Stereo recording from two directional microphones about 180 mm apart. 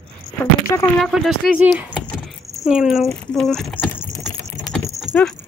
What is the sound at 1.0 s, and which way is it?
Speech, centre (ahead or behind).